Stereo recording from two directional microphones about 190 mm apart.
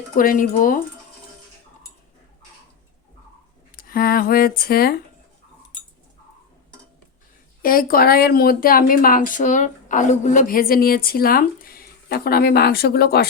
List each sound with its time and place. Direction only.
0.2 s speech: 45° left (ahead or behind)
3.8 s speech: 50° left (ahead or behind)
7.6 s speech: 50° left (ahead or behind)